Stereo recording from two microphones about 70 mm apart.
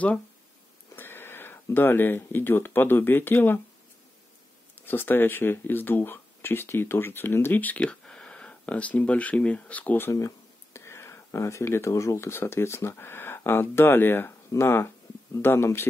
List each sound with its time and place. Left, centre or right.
0.9 s speech: left
4.7 s speech: left
10.1 s speech: left